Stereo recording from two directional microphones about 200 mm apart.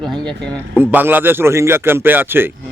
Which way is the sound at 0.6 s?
10° right (ahead or behind).